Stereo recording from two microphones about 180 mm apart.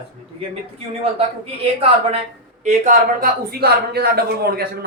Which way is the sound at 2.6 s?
45° right (ahead or behind).